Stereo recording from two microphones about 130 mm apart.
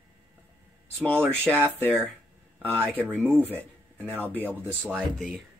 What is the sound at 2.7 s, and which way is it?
Speech, 15° right (ahead or behind).